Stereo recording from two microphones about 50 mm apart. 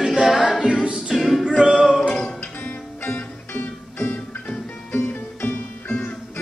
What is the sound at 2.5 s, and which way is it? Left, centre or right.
Music, left.